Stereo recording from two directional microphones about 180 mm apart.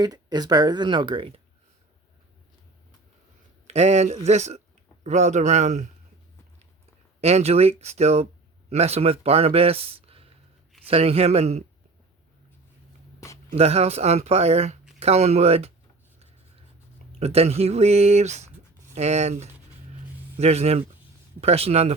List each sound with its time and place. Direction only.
0.0 s speech: 20° right (ahead or behind)
3.7 s speech: 40° right (ahead or behind)
7.2 s speech: 35° right (ahead or behind)
13.1 s a sound: 15° left (ahead or behind)
13.6 s speech: 35° right (ahead or behind)
17.2 s speech: 35° right (ahead or behind)